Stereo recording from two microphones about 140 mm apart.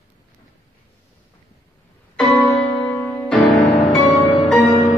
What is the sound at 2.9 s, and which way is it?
Music, 15° left (ahead or behind).